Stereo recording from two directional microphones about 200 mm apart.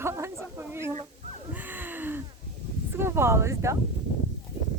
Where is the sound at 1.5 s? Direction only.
10° right (ahead or behind).